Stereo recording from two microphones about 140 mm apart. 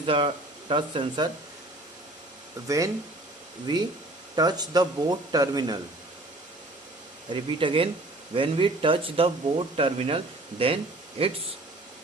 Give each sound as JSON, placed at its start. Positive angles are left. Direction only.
{"t": 0.0, "sound": "speech", "side_deg": -40}
{"t": 2.6, "sound": "speech", "side_deg": -25}
{"t": 7.3, "sound": "speech", "side_deg": -35}